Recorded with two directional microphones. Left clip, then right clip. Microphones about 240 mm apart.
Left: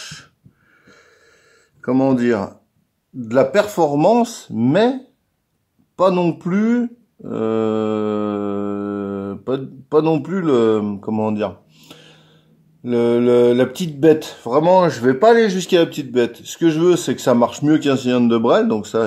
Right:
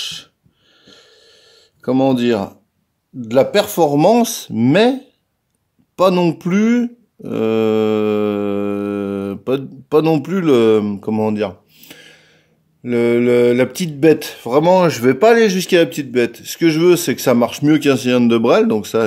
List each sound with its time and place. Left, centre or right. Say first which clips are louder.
0.9 s a sound: right 5 dB; right
1.8 s speech: right 2 dB; right
5.9 s speech: right 2 dB; right